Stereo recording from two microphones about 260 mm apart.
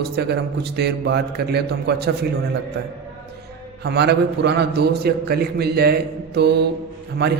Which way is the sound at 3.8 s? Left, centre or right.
Right.